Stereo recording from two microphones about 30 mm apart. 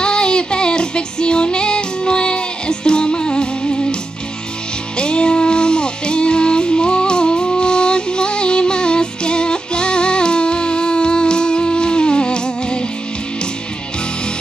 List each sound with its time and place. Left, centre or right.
0.0 s music: left
4.9 s music: left